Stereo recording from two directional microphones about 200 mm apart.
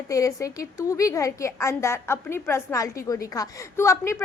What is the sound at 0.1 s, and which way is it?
A woman's voice, 15° left (ahead or behind).